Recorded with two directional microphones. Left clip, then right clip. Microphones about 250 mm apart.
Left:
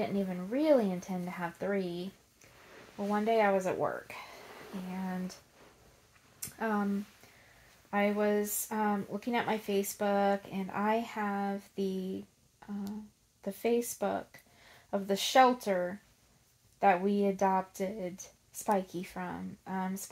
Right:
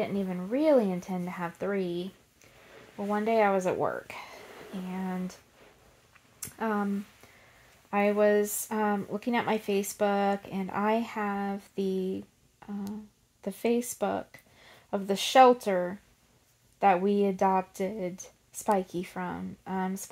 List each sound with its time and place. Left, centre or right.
0.0 s a woman's voice: right
3.1 s speech: right
6.4 s a sound: right
7.9 s speech: right
13.4 s speech: right